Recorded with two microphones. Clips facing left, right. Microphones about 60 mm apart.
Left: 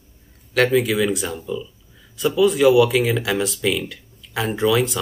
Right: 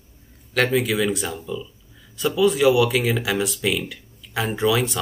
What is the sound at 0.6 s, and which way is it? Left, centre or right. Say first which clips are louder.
Speech: left 3 dB; centre.